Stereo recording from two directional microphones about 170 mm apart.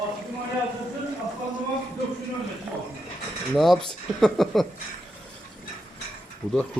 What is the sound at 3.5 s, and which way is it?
A man's voice, centre (ahead or behind).